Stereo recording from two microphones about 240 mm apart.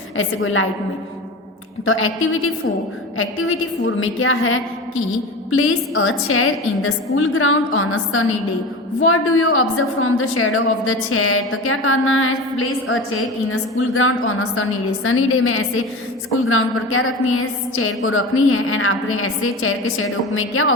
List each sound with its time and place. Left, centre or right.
0.2 s a woman's voice: left
1.8 s a woman's voice: left